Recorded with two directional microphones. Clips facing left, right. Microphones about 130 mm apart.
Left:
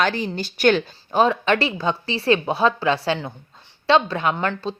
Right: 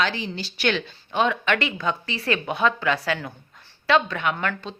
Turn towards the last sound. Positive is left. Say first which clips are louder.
# left 4 dB
turn(degrees=30)  # may be behind; listen again after turning